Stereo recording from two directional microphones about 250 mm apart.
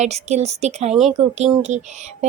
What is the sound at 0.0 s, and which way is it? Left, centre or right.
Speech, right.